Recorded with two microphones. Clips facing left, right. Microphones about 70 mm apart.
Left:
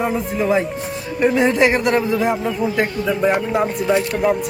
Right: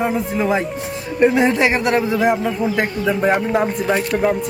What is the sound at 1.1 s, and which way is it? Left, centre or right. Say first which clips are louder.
Speech: right 1 dB; right.